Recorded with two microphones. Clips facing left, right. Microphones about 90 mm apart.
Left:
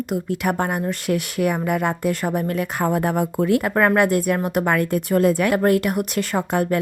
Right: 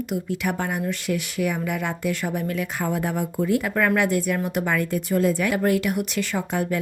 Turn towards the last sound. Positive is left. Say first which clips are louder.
# left 4 dB
turn(degrees=55)  # may be behind; listen again after turning